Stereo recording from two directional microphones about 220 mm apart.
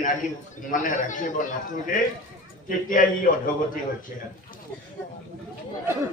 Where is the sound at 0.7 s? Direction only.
35° left (ahead or behind).